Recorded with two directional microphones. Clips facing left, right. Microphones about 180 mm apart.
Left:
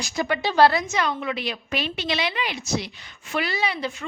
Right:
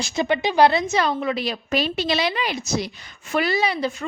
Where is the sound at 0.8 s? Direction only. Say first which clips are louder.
Right 4 dB; 35° right (ahead or behind).